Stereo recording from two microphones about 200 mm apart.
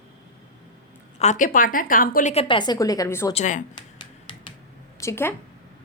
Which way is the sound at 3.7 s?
20° left (ahead or behind).